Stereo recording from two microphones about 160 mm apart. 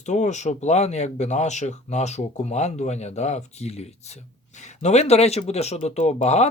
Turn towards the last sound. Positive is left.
turn(degrees=45)  # may be behind; listen again after turning